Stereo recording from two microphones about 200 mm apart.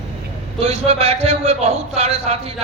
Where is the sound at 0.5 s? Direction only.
30° right (ahead or behind).